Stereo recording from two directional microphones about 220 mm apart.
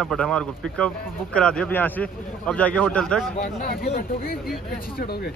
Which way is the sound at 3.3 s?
45° left (ahead or behind).